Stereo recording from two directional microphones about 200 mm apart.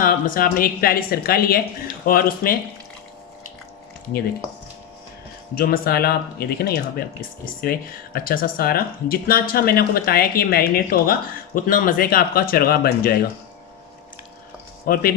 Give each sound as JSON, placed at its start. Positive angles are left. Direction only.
{"t": 0.0, "sound": "speech", "side_deg": 45}
{"t": 5.5, "sound": "speech", "side_deg": 45}
{"t": 14.9, "sound": "speech", "side_deg": 50}